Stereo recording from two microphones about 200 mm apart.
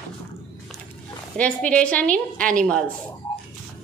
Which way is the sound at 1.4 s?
5° left (ahead or behind).